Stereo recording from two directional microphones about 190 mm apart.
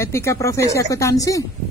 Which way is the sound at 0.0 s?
15° left (ahead or behind).